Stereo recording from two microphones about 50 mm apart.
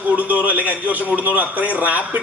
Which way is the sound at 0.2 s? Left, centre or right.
Right.